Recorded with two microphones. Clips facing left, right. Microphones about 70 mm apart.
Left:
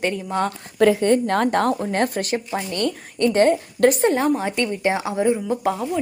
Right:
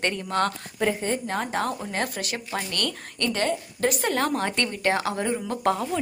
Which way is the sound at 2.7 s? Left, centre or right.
Centre.